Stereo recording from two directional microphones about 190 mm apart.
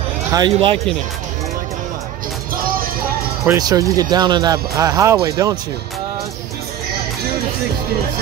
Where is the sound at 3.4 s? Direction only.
15° right (ahead or behind).